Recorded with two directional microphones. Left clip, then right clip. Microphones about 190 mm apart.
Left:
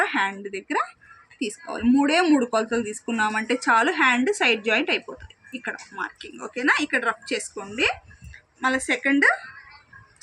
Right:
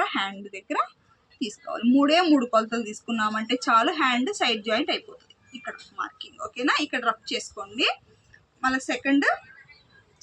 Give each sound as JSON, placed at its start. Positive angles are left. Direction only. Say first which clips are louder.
{"t": 0.0, "sound": "speech", "louder": "left 4 dB", "side_deg": -15}
{"t": 6.5, "sound": "speech", "louder": "left 3 dB", "side_deg": -20}